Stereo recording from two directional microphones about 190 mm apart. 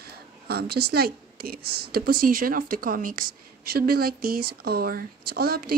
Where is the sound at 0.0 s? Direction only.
55° right (ahead or behind).